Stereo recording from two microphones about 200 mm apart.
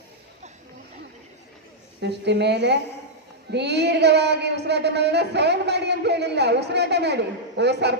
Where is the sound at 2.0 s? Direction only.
60° right (ahead or behind).